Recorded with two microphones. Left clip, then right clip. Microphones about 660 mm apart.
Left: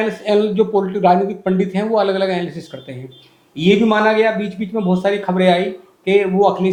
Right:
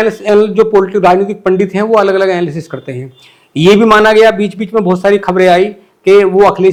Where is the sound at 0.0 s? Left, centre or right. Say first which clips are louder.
Right 7 dB; right.